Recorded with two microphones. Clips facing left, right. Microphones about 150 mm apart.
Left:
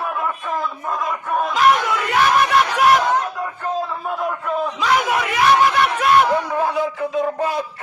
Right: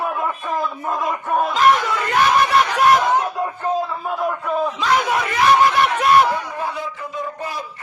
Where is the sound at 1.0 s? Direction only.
20° right (ahead or behind).